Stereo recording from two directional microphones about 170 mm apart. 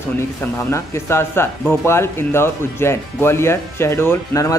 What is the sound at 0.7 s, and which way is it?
Speech, 15° left (ahead or behind).